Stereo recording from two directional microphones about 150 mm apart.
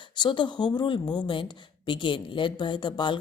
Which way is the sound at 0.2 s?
30° left (ahead or behind).